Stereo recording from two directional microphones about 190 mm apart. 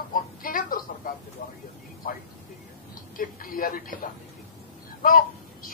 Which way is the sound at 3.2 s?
45° left (ahead or behind).